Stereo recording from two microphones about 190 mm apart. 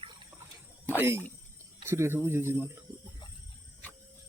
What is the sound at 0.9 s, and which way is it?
Speech, 10° right (ahead or behind).